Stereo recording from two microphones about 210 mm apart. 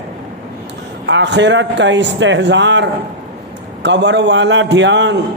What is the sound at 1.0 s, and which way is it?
A man's voice, 55° right (ahead or behind).